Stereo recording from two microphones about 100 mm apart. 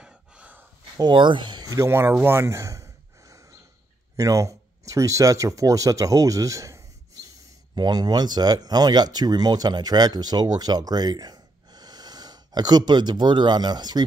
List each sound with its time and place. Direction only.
0.0 s gasp: 15° right (ahead or behind)
0.9 s speech: 50° right (ahead or behind)
1.9 s speech: 25° right (ahead or behind)
7.7 s speech: 45° right (ahead or behind)